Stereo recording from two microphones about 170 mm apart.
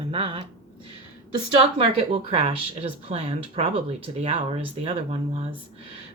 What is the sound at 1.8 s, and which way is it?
Speech, 35° right (ahead or behind).